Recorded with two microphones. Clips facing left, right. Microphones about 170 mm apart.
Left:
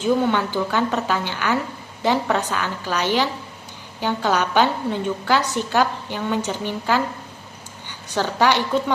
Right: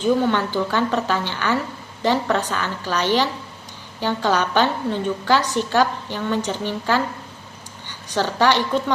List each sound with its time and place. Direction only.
0.0 s a woman's voice: 10° left (ahead or behind)